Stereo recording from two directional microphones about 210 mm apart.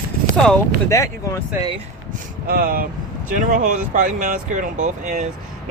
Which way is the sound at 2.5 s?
45° right (ahead or behind).